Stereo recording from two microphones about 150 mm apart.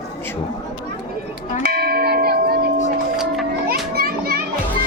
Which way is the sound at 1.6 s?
90° right.